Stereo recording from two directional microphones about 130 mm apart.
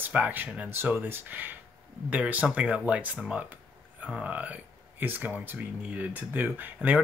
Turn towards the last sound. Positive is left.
turn(degrees=-15)  # may be behind; listen again after turning